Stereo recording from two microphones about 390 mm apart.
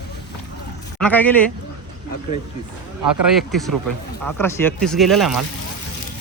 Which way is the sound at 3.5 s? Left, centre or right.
Centre.